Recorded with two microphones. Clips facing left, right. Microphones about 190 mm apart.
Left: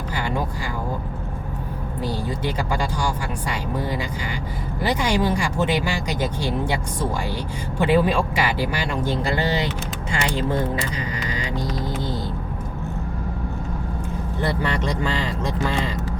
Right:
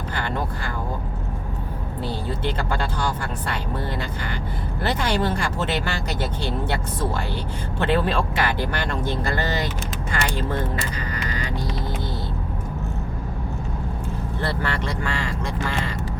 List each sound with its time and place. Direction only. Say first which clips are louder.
0.1 s speech: left 2 dB; 10° left (ahead or behind)
2.0 s speech: left 1 dB; 10° left (ahead or behind)
14.4 s speech: left 3 dB; 15° left (ahead or behind)